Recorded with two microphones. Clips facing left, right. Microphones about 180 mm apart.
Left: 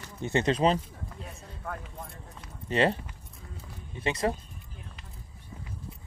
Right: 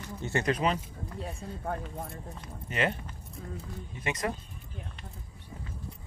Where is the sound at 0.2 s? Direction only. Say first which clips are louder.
Left 4 dB; 20° left (ahead or behind).